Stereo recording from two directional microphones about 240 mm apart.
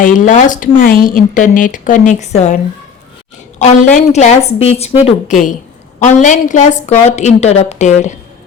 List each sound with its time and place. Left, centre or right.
0.0 s speech: left
3.9 s a woman's voice: left